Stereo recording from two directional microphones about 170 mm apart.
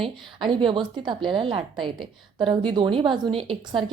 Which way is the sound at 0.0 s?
30° right (ahead or behind).